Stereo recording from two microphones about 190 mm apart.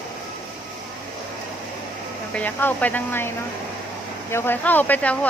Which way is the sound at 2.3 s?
10° left (ahead or behind).